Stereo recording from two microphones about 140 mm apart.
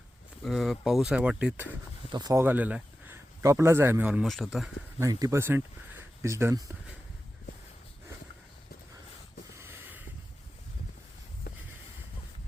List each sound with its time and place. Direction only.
0.4 s speech: centre (ahead or behind)
2.1 s speech: 30° right (ahead or behind)
2.4 s speech: 10° right (ahead or behind)
4.9 s speech: 20° right (ahead or behind)
9.6 s a sound: 15° right (ahead or behind)